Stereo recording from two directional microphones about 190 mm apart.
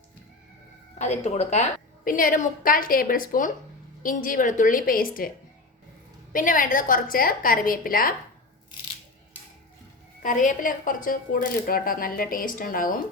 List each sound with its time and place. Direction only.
0.9 s a woman's voice: 35° left (ahead or behind)
6.3 s a woman's voice: 45° left (ahead or behind)
10.2 s a woman's voice: 45° left (ahead or behind)